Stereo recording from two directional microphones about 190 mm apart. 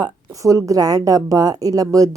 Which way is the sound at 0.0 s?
20° right (ahead or behind).